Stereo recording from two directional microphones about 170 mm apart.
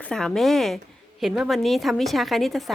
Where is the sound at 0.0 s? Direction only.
5° left (ahead or behind).